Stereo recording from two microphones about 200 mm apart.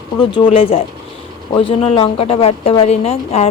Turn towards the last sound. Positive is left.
turn(degrees=30)  # may be behind; listen again after turning